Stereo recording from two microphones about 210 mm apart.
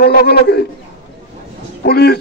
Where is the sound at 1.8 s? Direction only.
50° left (ahead or behind).